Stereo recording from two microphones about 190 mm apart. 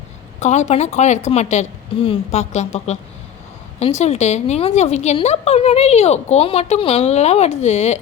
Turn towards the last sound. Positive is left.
turn(degrees=35)  # may be behind; listen again after turning